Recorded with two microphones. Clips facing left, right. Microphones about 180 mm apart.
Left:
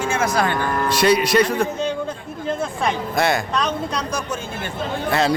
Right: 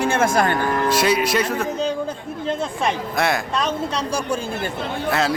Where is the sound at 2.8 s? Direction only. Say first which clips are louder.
Left 1 dB; centre (ahead or behind).